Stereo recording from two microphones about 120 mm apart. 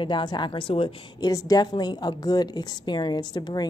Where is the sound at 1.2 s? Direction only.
30° left (ahead or behind).